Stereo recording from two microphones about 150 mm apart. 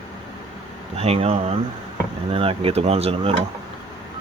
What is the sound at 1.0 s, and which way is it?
Speech, 40° right (ahead or behind).